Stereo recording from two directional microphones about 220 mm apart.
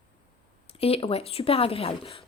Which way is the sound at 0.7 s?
25° left (ahead or behind).